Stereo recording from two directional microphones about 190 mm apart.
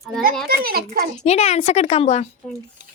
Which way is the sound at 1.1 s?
35° left (ahead or behind).